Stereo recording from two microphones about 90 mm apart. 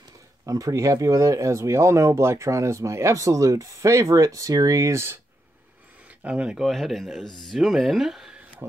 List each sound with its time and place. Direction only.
0.5 s speech: 40° right (ahead or behind)
6.2 s speech: 15° right (ahead or behind)
6.6 s speech: centre (ahead or behind)